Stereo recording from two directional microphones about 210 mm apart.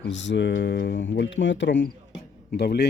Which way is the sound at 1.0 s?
60° left (ahead or behind).